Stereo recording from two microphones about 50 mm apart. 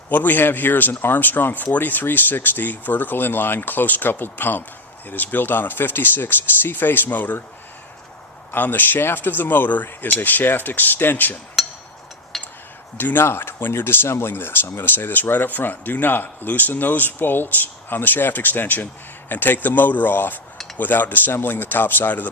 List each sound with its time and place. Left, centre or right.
0.1 s speech: left
8.5 s speech: left
11.6 s a sound: centre
13.0 s speech: left